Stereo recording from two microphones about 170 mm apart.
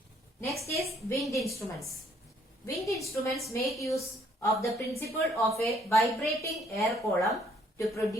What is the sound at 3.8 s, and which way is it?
A woman's voice, 20° left (ahead or behind).